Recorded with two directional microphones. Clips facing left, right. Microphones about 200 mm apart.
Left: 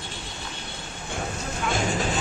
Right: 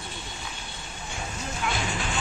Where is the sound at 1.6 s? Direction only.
45° left (ahead or behind).